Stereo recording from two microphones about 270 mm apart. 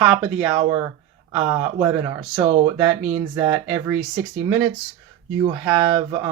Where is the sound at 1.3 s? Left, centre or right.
Right.